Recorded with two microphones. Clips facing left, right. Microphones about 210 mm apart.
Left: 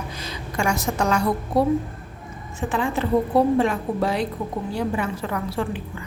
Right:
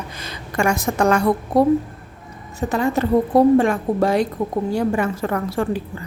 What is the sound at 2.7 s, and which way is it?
A woman's voice, 40° right (ahead or behind).